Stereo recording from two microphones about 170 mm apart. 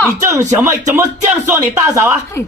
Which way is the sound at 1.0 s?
15° right (ahead or behind).